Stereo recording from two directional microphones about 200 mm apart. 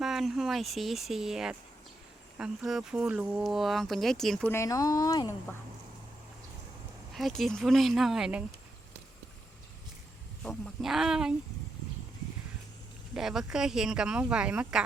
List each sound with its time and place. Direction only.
0.0 s speech: centre (ahead or behind)
4.5 s speech: 15° left (ahead or behind)
7.1 s speech: centre (ahead or behind)
10.4 s speech: centre (ahead or behind)
13.1 s speech: centre (ahead or behind)